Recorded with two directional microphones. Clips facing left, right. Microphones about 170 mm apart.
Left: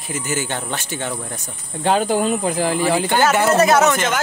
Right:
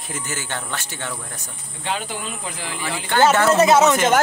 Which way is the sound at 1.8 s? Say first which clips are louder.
Left 11 dB; 45° left (ahead or behind).